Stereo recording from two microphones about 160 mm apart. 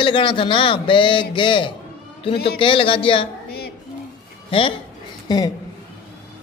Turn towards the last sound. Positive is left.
turn(degrees=25)  # may be behind; listen again after turning